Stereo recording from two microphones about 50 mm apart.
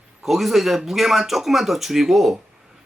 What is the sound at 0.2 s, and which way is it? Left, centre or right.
Speech, centre.